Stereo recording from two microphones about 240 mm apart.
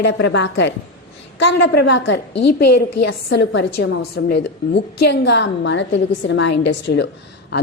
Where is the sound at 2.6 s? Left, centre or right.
Left.